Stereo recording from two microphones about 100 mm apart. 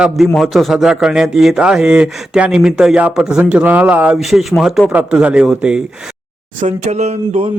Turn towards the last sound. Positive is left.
turn(degrees=-90)